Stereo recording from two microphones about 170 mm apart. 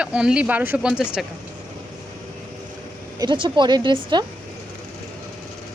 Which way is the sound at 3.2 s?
25° right (ahead or behind).